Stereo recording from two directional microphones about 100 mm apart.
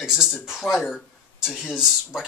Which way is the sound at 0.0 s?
5° right (ahead or behind).